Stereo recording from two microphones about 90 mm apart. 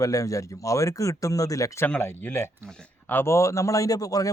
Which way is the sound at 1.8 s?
20° left (ahead or behind).